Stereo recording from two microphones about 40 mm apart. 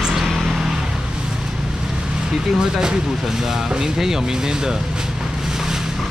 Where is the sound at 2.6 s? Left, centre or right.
Centre.